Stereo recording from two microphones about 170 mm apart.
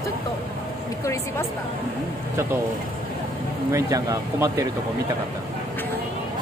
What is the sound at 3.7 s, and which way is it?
Speech, 20° right (ahead or behind).